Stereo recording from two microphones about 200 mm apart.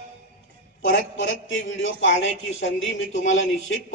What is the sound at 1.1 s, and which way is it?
A man's voice, 70° left (ahead or behind).